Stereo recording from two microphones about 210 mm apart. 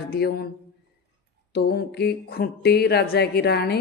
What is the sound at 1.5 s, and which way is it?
A woman's voice, 45° left (ahead or behind).